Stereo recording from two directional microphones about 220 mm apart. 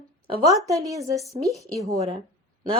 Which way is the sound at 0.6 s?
15° right (ahead or behind).